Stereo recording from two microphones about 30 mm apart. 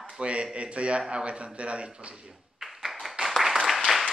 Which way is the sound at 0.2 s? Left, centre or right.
Right.